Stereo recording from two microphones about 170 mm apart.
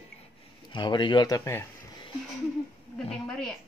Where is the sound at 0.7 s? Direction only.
30° left (ahead or behind).